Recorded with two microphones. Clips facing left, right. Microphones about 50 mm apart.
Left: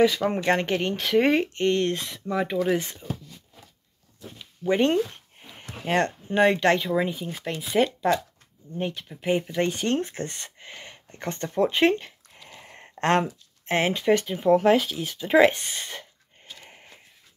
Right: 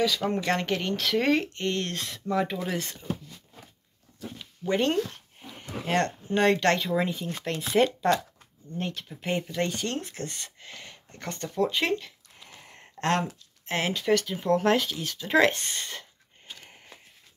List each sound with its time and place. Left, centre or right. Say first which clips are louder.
0.3 s speech: left 3 dB; left
4.6 s a sound: left 4 dB; centre
6.2 s speech: left 3 dB; centre
9.6 s speech: left 5 dB; left
12.5 s a sound: left 5 dB; left
13.7 s speech: left 4 dB; left
14.3 s speech: left 4 dB; centre